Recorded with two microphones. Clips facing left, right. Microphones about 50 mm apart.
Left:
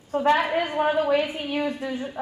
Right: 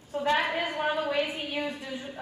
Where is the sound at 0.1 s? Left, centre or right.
Left.